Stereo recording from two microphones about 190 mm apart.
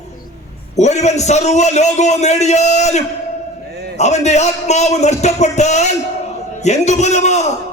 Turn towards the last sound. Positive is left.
turn(degrees=35)  # may be behind; listen again after turning